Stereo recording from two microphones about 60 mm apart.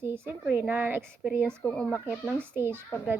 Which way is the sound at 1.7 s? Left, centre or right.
Centre.